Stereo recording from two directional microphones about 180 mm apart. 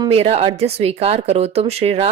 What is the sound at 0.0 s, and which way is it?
Speech, 35° right (ahead or behind).